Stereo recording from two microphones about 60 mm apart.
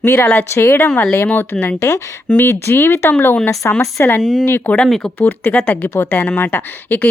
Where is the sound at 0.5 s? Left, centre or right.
Left.